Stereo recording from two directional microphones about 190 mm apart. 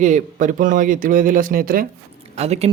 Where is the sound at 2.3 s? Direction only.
35° right (ahead or behind).